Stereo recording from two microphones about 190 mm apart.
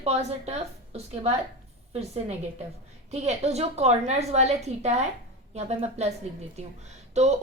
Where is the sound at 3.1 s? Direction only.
35° right (ahead or behind).